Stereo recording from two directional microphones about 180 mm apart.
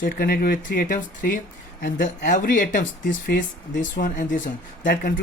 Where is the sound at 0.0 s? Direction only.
50° left (ahead or behind).